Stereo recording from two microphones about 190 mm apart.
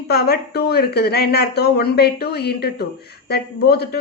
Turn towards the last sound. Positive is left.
turn(degrees=55)  # may be behind; listen again after turning